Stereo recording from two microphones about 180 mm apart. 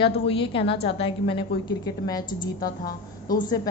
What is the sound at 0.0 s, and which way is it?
A woman's voice, 30° left (ahead or behind).